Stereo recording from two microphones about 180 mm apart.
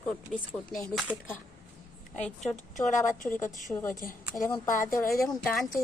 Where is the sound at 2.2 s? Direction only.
5° left (ahead or behind).